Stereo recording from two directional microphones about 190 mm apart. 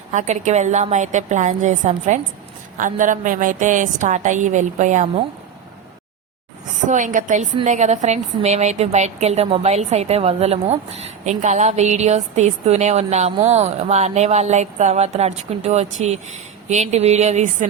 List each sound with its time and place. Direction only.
0.1 s a woman's voice: 40° right (ahead or behind)
6.8 s a woman's voice: 40° right (ahead or behind)